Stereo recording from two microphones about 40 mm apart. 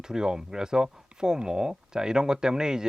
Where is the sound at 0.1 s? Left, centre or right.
Centre.